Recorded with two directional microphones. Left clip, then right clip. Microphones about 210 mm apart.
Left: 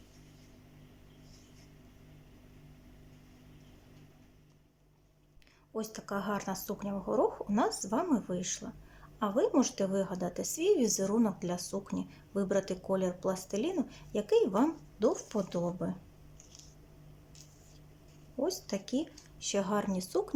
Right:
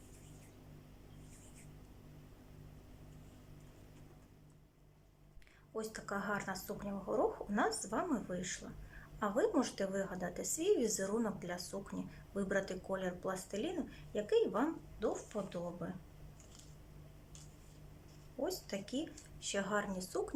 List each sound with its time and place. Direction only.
5.7 s a woman's voice: 15° left (ahead or behind)
18.3 s a woman's voice: 15° left (ahead or behind)